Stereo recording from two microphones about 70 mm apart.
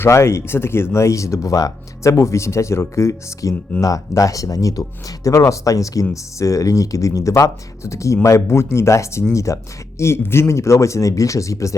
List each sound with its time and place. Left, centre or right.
0.0 s speech: left